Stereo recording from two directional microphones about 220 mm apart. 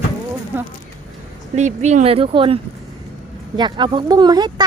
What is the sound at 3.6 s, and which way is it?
Speech, 20° right (ahead or behind).